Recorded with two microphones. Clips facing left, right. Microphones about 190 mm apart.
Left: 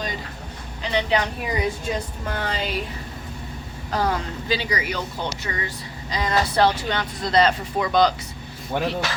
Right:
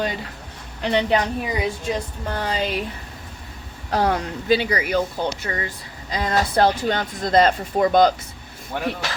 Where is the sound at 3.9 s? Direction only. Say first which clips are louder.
Right 3 dB; 60° right (ahead or behind).